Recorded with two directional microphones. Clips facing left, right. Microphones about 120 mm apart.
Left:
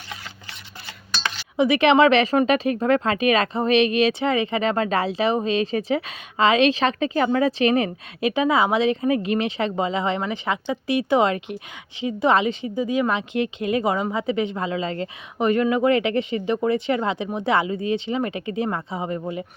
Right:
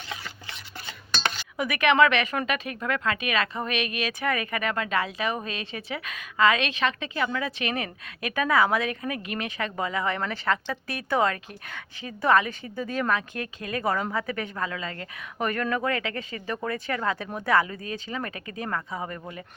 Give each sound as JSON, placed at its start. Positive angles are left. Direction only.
{"t": 1.5, "sound": "speech", "side_deg": 25}